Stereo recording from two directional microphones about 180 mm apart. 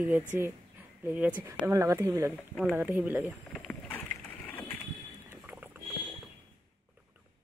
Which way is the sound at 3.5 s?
5° left (ahead or behind).